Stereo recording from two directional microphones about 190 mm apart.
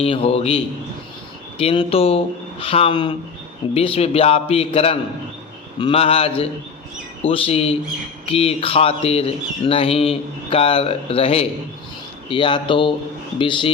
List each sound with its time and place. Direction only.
0.0 s speech: 30° left (ahead or behind)